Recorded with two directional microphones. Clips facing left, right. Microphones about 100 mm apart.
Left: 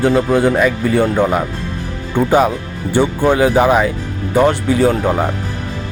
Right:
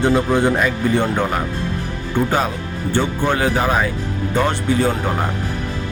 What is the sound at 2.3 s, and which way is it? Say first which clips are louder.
Speech: left 7 dB; 15° left (ahead or behind).